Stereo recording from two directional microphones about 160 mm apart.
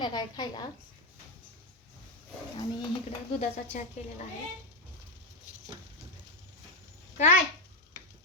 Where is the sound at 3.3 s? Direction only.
50° left (ahead or behind).